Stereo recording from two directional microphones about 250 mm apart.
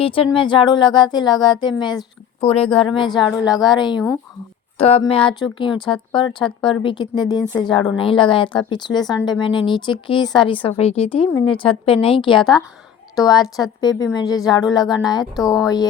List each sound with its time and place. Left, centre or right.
0.0 s a woman's voice: left